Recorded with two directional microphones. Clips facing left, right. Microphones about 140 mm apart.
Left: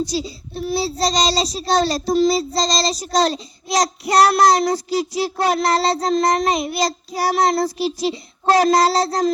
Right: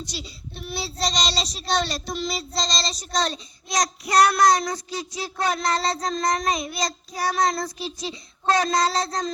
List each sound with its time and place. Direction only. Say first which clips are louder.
0.0 s speech: left 13 dB; 35° left (ahead or behind)